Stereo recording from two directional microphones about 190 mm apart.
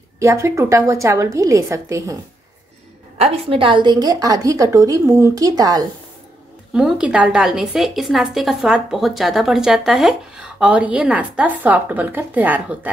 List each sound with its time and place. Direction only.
0.2 s speech: 15° right (ahead or behind)
3.2 s a woman's voice: 30° right (ahead or behind)
6.7 s a woman's voice: 5° right (ahead or behind)